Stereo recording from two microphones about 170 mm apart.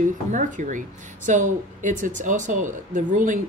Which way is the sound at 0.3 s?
50° right (ahead or behind).